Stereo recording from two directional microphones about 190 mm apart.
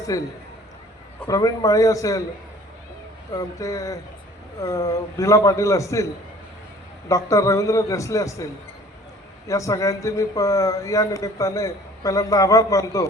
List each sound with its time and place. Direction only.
0.1 s speech: 15° left (ahead or behind)
1.3 s speech: 15° left (ahead or behind)
3.3 s speech: 15° left (ahead or behind)
7.1 s speech: 15° left (ahead or behind)
9.5 s speech: 15° left (ahead or behind)